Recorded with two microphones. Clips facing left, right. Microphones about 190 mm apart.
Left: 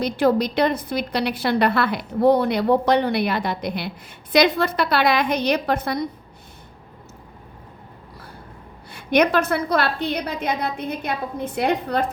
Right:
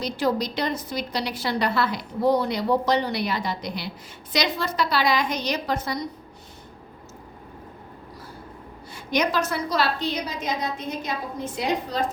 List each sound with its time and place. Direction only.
0.0 s a woman's voice: 55° left (ahead or behind)
8.9 s a woman's voice: 60° left (ahead or behind)